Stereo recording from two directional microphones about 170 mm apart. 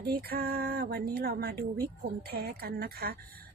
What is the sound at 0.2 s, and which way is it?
A woman's voice, 65° right (ahead or behind).